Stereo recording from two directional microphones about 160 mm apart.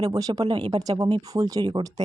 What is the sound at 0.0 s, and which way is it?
Speech, 25° right (ahead or behind).